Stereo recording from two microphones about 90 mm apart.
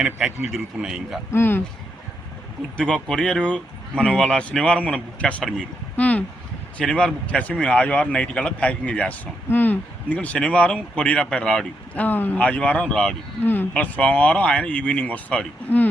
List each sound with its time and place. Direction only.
0.0 s speech: 5° right (ahead or behind)
1.3 s speech: 25° left (ahead or behind)
2.7 s speech: 5° left (ahead or behind)
5.4 s speech: centre (ahead or behind)
6.0 s speech: 15° left (ahead or behind)
13.4 s speech: 20° left (ahead or behind)